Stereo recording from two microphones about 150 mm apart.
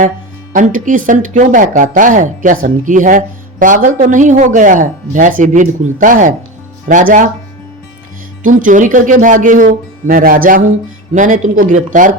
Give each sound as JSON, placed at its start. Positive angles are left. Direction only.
{"t": 0.5, "sound": "speech", "side_deg": -60}
{"t": 8.4, "sound": "speech", "side_deg": -60}